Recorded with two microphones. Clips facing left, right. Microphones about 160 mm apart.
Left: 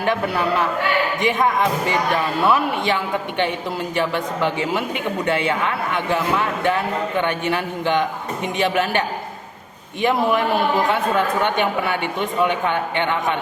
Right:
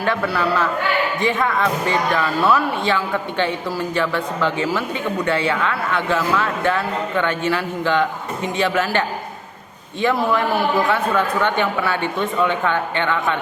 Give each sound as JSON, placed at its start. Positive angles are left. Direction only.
{"t": 0.3, "sound": "speech", "side_deg": 15}